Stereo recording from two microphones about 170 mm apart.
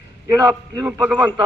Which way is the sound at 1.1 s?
20° right (ahead or behind).